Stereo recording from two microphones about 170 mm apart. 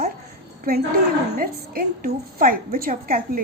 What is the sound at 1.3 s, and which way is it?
A woman's voice, 65° right (ahead or behind).